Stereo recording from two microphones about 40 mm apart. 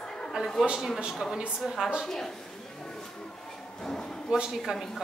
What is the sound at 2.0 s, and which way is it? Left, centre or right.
Speech, centre.